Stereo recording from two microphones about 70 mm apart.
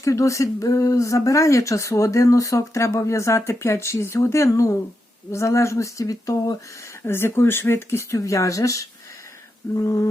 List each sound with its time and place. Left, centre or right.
0.0 s speech: left
7.0 s speech: left